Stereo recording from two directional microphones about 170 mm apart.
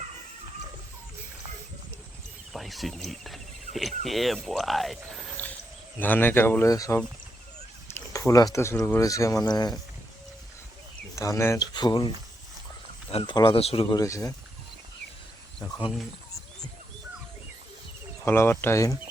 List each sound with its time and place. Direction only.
2.5 s speech: centre (ahead or behind)
6.0 s speech: 10° left (ahead or behind)
11.1 s speech: 20° left (ahead or behind); by 13.8 s 35° left (ahead or behind)
13.9 s speech: 20° left (ahead or behind)
18.3 s speech: 15° left (ahead or behind)